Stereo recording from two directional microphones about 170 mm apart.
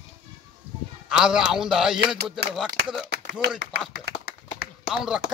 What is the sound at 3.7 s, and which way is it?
Speech, 80° right.